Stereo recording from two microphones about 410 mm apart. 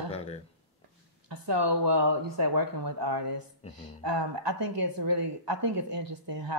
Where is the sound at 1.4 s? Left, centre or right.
Right.